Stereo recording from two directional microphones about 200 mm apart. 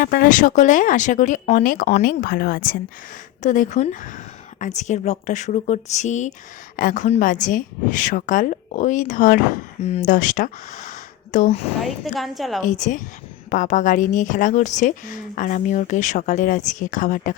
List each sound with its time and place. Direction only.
0.0 s a woman's voice: 45° left (ahead or behind)
11.8 s a woman's voice: centre (ahead or behind)
12.6 s a woman's voice: 40° left (ahead or behind)